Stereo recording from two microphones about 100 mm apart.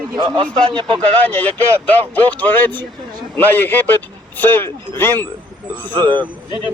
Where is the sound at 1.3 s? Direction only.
15° left (ahead or behind).